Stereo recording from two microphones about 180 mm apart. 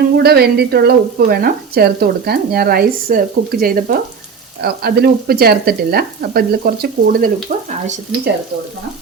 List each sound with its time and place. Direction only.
0.2 s speech: 60° right (ahead or behind)
7.5 s frying: 40° right (ahead or behind)